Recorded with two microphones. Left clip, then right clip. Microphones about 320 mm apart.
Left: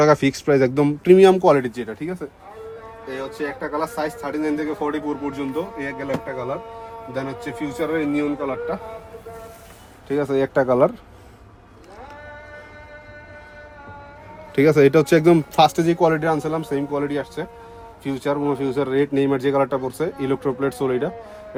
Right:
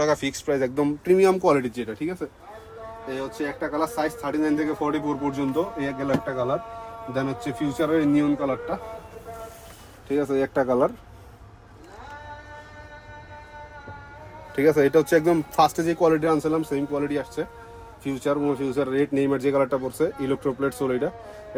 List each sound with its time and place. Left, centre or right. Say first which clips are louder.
0.0 s speech: left 7 dB; left; by 5.3 s centre
7.1 s speech: right 1 dB; centre
10.1 s speech: left 3 dB; centre
10.6 s speech: left 5 dB; left
14.5 s speech: left 4 dB; left